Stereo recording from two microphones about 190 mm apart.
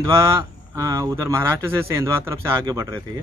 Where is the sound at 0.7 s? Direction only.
15° right (ahead or behind).